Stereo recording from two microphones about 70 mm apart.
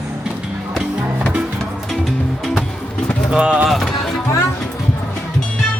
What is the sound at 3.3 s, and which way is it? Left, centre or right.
Speech, centre.